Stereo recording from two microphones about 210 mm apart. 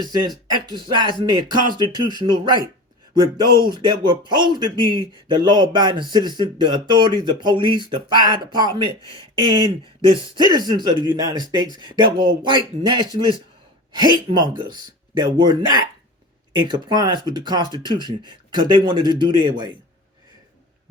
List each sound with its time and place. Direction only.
0.4 s speech: 20° right (ahead or behind)
3.6 s speech: 20° right (ahead or behind)